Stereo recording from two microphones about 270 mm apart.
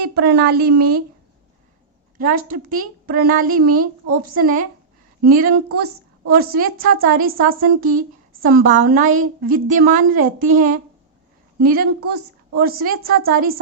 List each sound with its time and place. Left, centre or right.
0.1 s a woman's voice: right
2.1 s a woman's voice: right
11.6 s a woman's voice: right